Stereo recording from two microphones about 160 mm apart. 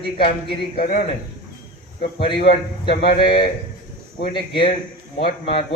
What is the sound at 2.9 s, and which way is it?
Speech, 70° left (ahead or behind).